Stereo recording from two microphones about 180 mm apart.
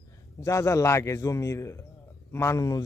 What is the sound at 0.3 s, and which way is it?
A man's voice, 15° left (ahead or behind).